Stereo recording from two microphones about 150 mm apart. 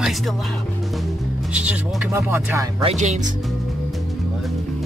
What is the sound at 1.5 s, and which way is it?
Speech, 10° right (ahead or behind).